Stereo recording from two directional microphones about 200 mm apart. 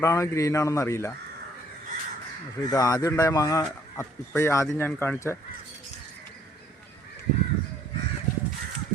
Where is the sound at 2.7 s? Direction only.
20° left (ahead or behind).